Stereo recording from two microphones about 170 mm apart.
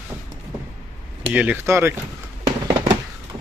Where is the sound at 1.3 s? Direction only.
10° right (ahead or behind).